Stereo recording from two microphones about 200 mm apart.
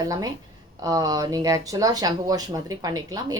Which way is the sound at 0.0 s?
20° right (ahead or behind).